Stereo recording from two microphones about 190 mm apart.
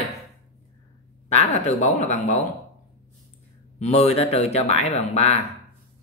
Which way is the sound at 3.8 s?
35° left (ahead or behind).